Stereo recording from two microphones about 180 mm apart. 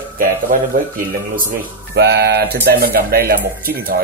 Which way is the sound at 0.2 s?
50° right (ahead or behind).